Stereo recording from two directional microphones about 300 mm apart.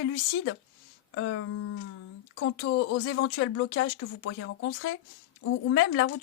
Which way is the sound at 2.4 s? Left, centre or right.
Left.